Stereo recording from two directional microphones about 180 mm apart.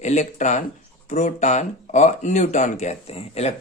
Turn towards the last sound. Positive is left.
turn(degrees=35)  # may be behind; listen again after turning